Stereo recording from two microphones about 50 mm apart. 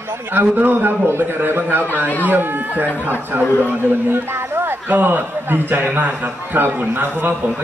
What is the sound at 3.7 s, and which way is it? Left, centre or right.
A man's voice, right.